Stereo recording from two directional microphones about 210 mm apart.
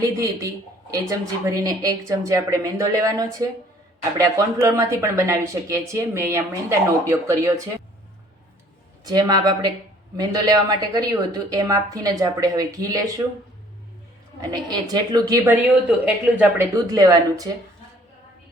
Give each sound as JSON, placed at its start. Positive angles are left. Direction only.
{"t": 1.0, "sound": "speech", "side_deg": -15}
{"t": 9.0, "sound": "speech", "side_deg": -20}
{"t": 14.5, "sound": "speech", "side_deg": -20}